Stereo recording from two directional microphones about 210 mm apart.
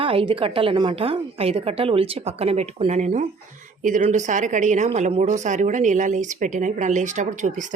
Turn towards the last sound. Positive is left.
turn(degrees=-35)  # may be behind; listen again after turning